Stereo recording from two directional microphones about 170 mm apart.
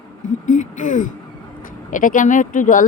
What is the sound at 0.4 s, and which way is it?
Speech, 50° left (ahead or behind).